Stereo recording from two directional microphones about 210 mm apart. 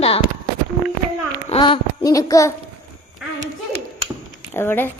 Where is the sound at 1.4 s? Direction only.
25° left (ahead or behind).